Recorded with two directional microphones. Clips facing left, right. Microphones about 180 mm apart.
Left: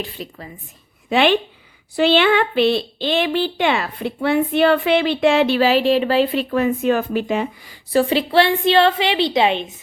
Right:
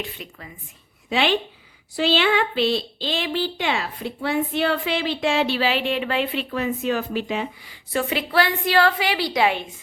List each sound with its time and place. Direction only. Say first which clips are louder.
0.0 s a woman's voice: left 4 dB; 35° left (ahead or behind)
1.1 s a woman's voice: left 5 dB; 55° left (ahead or behind); by 9.6 s 25° left (ahead or behind)